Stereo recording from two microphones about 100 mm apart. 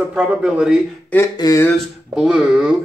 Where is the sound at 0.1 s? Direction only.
10° right (ahead or behind).